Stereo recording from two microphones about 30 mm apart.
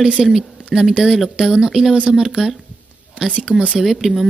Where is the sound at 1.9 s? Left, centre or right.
Right.